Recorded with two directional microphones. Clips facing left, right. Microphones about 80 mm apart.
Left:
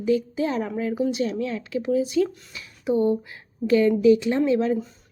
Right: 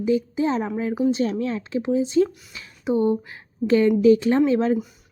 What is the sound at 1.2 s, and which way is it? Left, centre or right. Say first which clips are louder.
A woman's voice: right 2 dB; right.